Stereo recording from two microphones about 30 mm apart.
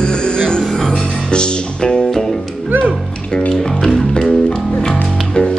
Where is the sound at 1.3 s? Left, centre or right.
Left.